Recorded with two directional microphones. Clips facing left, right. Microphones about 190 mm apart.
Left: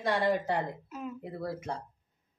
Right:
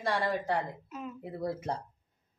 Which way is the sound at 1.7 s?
35° right (ahead or behind).